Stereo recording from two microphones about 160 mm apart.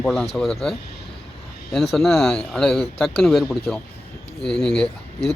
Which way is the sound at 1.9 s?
Centre (ahead or behind).